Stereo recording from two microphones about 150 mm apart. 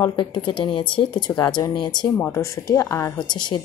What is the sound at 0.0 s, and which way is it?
Speech, 30° left (ahead or behind).